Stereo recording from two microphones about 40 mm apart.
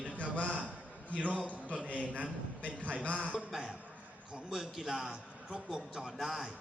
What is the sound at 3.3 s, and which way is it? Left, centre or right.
Speech, centre.